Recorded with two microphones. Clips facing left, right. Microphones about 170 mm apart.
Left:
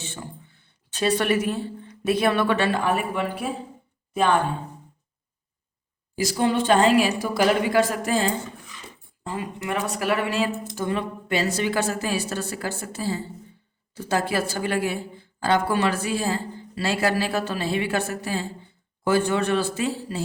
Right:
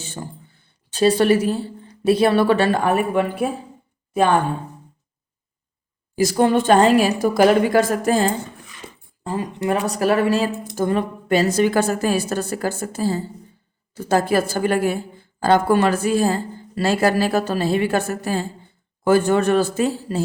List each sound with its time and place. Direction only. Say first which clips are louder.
0.0 s speech: right 4 dB; 40° right (ahead or behind)
6.1 s speech: right 6 dB; 50° right (ahead or behind)